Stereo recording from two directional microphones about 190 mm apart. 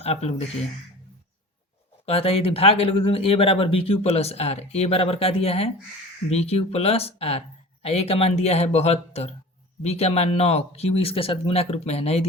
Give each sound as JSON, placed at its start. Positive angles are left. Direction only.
{"t": 0.0, "sound": "speech", "side_deg": 35}
{"t": 2.0, "sound": "speech", "side_deg": 30}